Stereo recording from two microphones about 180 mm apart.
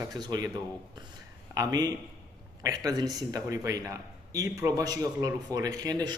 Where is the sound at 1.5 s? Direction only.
20° right (ahead or behind).